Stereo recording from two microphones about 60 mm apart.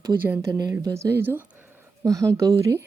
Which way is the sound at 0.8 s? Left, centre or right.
Right.